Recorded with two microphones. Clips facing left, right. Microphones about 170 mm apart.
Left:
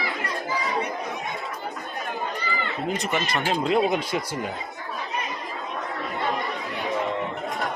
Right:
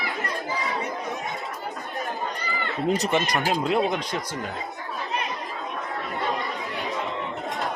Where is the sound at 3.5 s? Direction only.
Centre (ahead or behind).